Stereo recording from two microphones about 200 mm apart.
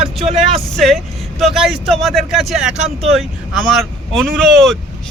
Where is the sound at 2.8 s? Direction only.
35° right (ahead or behind).